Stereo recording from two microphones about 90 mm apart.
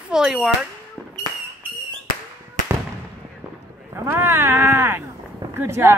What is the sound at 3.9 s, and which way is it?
Speech, 30° right (ahead or behind).